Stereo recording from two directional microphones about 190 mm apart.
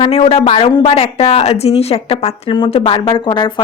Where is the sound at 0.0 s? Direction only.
30° left (ahead or behind).